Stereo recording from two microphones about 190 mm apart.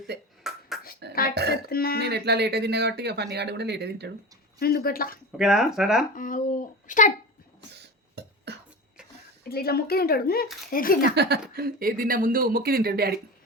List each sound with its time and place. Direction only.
0.4 s ping: centre (ahead or behind)
1.0 s music: 60° right (ahead or behind)
1.4 s speech: 60° right (ahead or behind)
1.7 s speech: 55° left (ahead or behind)
2.0 s speech: 60° right (ahead or behind)
4.6 s speech: 50° left (ahead or behind)
5.4 s speech: 5° right (ahead or behind)
6.1 s speech: 45° left (ahead or behind)
7.7 s beatboxing: 60° right (ahead or behind)
9.5 s speech: 55° left (ahead or behind)
11.1 s speech: 60° right (ahead or behind)